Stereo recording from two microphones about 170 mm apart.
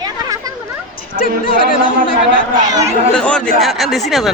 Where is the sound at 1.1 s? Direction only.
55° right (ahead or behind).